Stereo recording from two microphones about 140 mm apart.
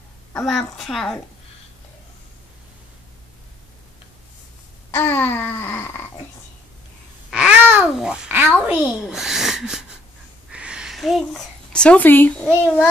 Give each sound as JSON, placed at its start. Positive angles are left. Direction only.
{"t": 0.5, "sound": "a child's voice", "side_deg": 5}
{"t": 4.9, "sound": "a sound", "side_deg": 15}
{"t": 7.2, "sound": "babbling", "side_deg": -5}
{"t": 7.9, "sound": "a child's voice", "side_deg": -5}